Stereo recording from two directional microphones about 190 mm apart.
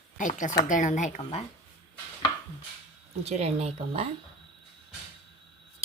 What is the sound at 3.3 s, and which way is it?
Speech, 35° right (ahead or behind).